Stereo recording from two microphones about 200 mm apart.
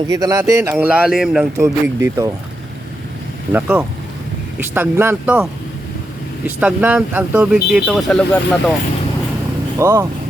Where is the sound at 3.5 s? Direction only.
10° right (ahead or behind).